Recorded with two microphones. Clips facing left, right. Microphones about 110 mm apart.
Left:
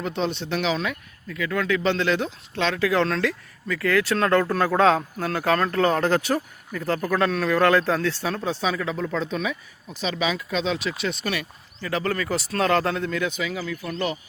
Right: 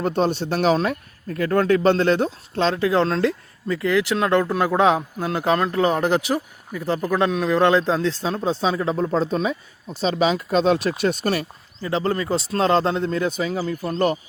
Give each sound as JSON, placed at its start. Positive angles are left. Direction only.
{"t": 0.0, "sound": "speech", "side_deg": -45}